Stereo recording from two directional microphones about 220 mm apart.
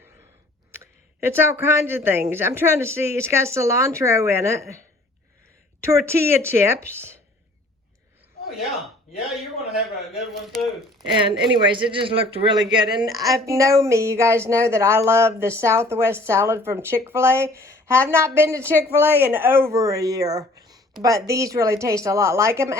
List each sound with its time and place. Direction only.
0.8 s speech: 10° right (ahead or behind)
5.8 s speech: 10° right (ahead or behind)
10.4 s speech: centre (ahead or behind)
11.3 s a man's voice: 25° right (ahead or behind)